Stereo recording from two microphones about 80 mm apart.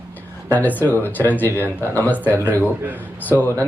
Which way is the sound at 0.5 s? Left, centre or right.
Left.